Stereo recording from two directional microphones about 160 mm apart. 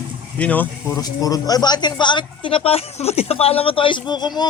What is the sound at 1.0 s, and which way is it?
Speech, 25° left (ahead or behind).